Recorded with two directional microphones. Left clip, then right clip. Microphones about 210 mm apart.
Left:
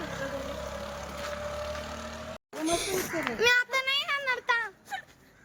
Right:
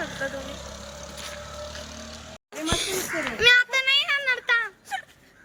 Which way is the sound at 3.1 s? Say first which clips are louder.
Right 7 dB; 15° left (ahead or behind).